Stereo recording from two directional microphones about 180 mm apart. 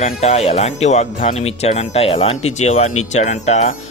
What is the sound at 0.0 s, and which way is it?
Speech, 35° left (ahead or behind).